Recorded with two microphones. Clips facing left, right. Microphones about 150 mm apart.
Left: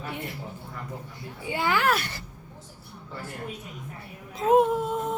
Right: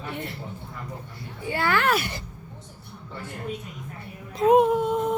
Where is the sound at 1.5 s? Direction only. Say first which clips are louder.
Right 1 dB; 15° left (ahead or behind).